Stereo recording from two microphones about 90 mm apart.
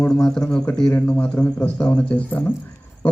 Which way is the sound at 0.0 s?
10° left (ahead or behind).